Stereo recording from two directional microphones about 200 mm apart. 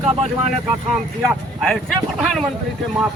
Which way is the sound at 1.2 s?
Centre (ahead or behind).